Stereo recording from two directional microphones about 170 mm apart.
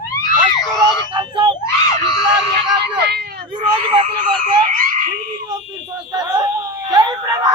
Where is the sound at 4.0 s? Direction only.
50° right (ahead or behind).